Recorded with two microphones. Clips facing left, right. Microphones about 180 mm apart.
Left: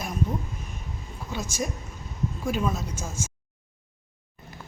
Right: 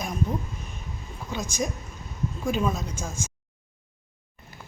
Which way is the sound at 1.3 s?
5° left (ahead or behind).